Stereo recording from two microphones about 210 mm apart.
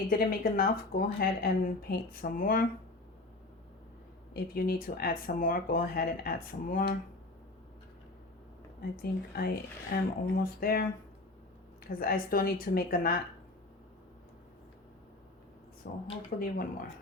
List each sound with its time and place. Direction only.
0.1 s speech: 45° left (ahead or behind)
4.4 s speech: 45° left (ahead or behind)
8.8 s speech: 45° left (ahead or behind)
15.9 s speech: 45° left (ahead or behind)